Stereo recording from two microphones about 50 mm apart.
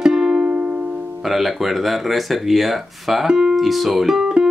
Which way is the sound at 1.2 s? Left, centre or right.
Centre.